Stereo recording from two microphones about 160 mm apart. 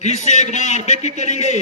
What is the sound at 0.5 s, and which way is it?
Speech, 50° left (ahead or behind).